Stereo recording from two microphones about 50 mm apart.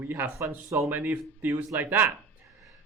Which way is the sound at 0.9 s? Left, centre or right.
Right.